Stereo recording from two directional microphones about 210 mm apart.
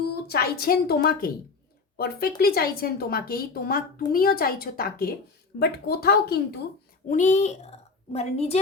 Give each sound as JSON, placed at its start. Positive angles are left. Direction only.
{"t": 0.3, "sound": "speech", "side_deg": 45}
{"t": 7.1, "sound": "a woman's voice", "side_deg": 35}